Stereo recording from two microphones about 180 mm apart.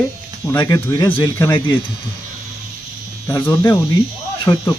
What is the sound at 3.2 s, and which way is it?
Speech, 15° left (ahead or behind).